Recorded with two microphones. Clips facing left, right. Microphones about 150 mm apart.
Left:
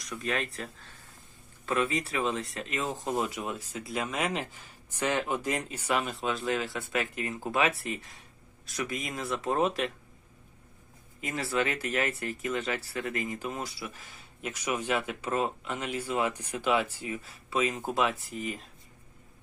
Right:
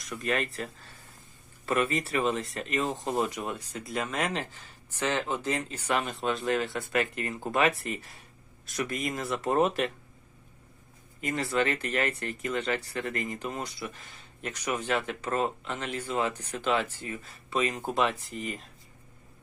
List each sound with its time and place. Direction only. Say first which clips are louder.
0.0 s speech: right 2 dB; centre (ahead or behind)
11.2 s speech: right 2 dB; centre (ahead or behind)